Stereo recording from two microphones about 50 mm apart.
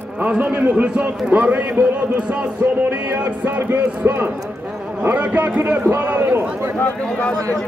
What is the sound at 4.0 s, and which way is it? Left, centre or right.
Speech, right.